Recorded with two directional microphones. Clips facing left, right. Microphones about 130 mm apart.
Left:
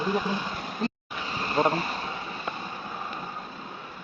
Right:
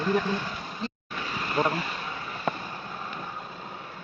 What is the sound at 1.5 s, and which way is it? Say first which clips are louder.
Speech: left 2 dB; 25° left (ahead or behind).